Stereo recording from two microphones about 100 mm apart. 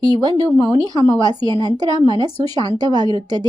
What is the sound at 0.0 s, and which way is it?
A woman's voice, 45° right (ahead or behind).